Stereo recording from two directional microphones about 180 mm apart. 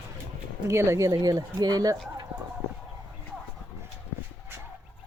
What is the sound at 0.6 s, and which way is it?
Speech, 15° right (ahead or behind).